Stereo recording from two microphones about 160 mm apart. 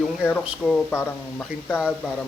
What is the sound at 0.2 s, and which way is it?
Speech, 5° left (ahead or behind).